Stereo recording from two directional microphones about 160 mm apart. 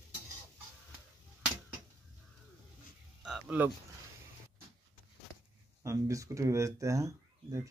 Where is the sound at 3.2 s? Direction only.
5° right (ahead or behind).